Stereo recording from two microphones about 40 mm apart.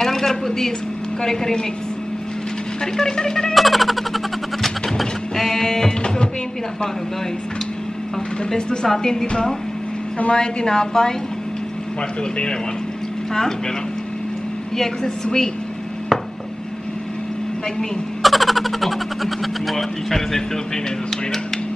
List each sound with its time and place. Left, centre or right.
0.0 s a sound: centre
1.2 s a woman's voice: centre
2.8 s a woman's voice: centre
3.5 s a sound: centre
8.5 s a woman's voice: centre
10.1 s a woman's voice: left
10.4 s a woman's voice: centre
15.2 s a woman's voice: centre
18.2 s speech: centre